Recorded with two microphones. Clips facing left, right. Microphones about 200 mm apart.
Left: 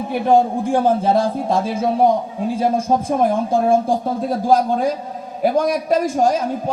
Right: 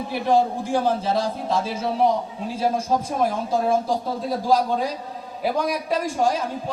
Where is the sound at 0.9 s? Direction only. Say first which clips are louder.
Left 6 dB; 55° left (ahead or behind).